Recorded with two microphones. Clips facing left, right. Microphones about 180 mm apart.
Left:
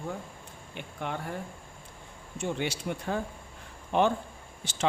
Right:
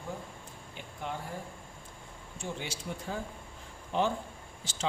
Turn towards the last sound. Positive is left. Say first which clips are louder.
# left 6 dB
turn(degrees=65)  # may be behind; listen again after turning